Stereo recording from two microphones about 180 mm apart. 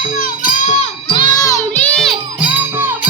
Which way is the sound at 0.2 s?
40° left (ahead or behind).